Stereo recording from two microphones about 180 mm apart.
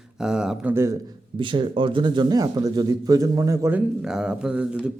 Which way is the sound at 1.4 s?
25° right (ahead or behind).